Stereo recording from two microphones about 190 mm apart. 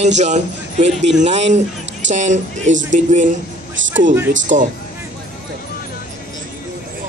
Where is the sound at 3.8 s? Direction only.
80° right.